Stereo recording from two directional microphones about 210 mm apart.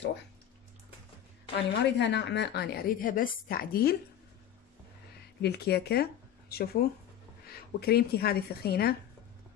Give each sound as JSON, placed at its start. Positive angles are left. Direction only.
{"t": 1.7, "sound": "a woman's voice", "side_deg": 55}
{"t": 5.4, "sound": "a woman's voice", "side_deg": 50}